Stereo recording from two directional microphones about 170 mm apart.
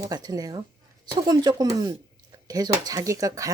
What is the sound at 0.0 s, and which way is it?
Speech, 20° right (ahead or behind).